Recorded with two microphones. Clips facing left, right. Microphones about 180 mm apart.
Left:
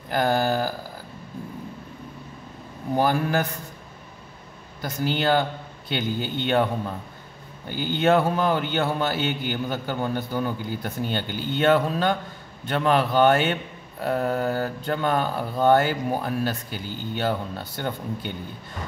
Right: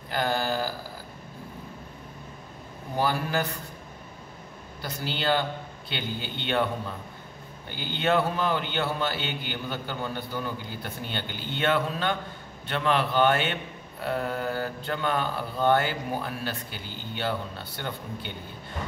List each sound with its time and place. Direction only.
0.1 s a sound: 45° left (ahead or behind)
3.0 s a man's voice: 45° left (ahead or behind)
4.8 s a man's voice: 45° left (ahead or behind)
7.7 s a man's voice: 45° left (ahead or behind)